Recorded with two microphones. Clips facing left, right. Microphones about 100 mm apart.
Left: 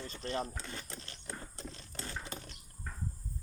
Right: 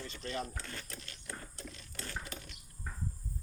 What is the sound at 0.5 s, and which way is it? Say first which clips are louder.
Ratchet: left 1 dB; 20° left (ahead or behind).